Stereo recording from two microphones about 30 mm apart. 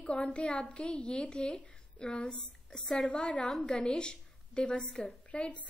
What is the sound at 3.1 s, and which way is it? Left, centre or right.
A woman's voice, left.